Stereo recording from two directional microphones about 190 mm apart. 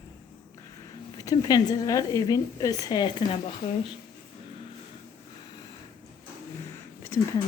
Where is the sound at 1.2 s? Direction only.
20° left (ahead or behind).